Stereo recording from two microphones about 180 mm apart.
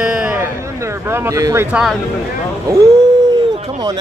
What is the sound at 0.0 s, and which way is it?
Music, 5° right (ahead or behind).